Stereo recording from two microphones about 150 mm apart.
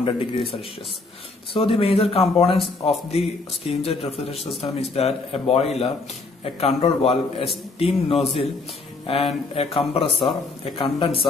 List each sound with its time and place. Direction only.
0.0 s a man's voice: 40° left (ahead or behind)